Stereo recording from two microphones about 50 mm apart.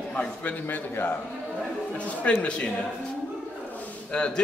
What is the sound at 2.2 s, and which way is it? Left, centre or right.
Speech, left.